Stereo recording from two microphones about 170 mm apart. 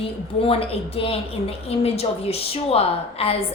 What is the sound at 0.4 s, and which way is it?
A woman's voice, 35° left (ahead or behind).